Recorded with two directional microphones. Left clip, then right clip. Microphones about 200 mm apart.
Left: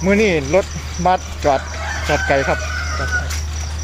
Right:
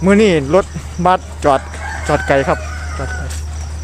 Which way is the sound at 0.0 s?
35° right (ahead or behind).